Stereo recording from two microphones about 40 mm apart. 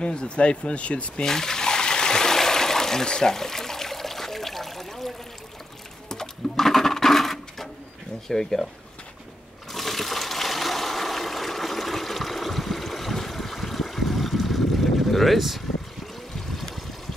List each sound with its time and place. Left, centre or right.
0.0 s speech: left
1.2 s water: centre
6.0 s a sound: centre
8.3 s speech: centre
9.7 s water: centre
16.3 s trickle: centre